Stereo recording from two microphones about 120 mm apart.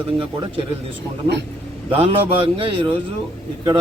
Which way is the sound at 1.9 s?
50° right (ahead or behind).